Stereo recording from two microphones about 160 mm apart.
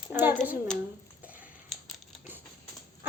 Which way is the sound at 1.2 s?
10° right (ahead or behind).